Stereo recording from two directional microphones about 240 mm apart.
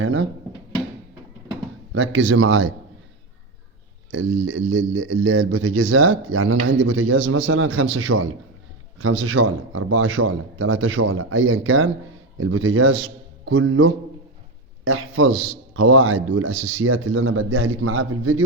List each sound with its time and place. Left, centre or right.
0.0 s speech: right
1.9 s speech: right
4.1 s a man's voice: right